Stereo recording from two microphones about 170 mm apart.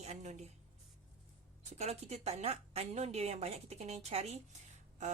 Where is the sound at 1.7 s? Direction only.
40° right (ahead or behind).